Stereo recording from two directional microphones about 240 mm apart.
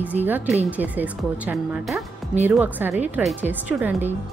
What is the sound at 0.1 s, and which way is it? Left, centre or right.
A woman's voice, centre.